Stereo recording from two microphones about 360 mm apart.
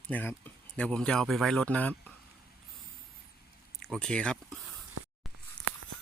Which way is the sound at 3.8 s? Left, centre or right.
Centre.